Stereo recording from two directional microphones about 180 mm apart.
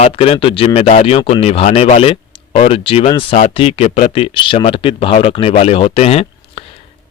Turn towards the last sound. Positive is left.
turn(degrees=35)  # may be behind; listen again after turning